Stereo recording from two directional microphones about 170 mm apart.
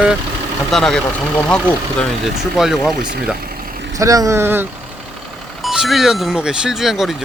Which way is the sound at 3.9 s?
20° right (ahead or behind).